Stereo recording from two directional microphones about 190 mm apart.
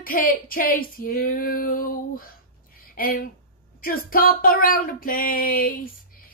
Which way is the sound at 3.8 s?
50° left (ahead or behind).